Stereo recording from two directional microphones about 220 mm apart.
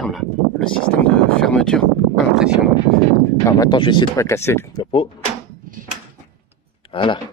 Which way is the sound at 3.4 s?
15° left (ahead or behind).